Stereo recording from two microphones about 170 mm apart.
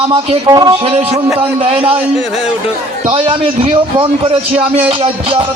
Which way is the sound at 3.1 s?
30° right (ahead or behind).